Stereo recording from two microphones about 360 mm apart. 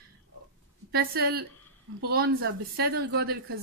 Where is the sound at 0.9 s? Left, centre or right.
Right.